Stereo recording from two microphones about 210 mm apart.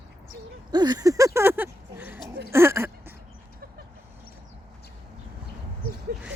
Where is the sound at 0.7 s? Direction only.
20° right (ahead or behind).